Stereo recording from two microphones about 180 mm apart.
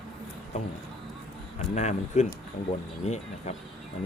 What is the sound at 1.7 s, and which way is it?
Speech, 40° left (ahead or behind).